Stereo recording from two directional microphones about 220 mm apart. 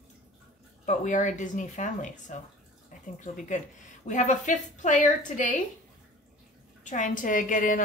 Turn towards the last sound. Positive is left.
turn(degrees=35)  # may be behind; listen again after turning